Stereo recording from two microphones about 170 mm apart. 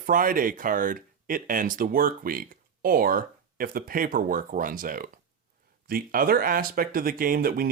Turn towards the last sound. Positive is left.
turn(degrees=-60)  # may be behind; listen again after turning